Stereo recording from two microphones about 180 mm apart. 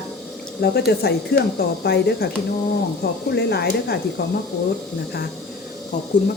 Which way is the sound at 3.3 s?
70° left (ahead or behind).